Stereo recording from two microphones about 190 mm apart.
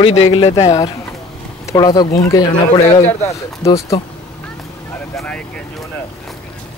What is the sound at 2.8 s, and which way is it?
Speech, 35° left (ahead or behind).